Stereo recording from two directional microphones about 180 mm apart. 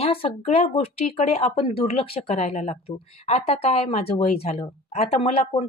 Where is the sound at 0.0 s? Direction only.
30° left (ahead or behind).